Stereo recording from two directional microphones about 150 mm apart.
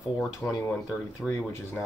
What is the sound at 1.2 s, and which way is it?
Speech, 20° left (ahead or behind).